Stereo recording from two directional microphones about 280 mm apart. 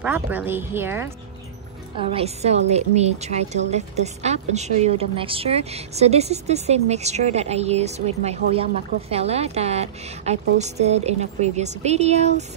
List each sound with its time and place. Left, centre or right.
0.0 s speech: centre
2.0 s a woman's voice: right